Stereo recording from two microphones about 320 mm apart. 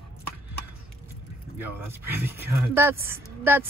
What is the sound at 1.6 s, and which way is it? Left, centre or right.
A woman's voice, centre.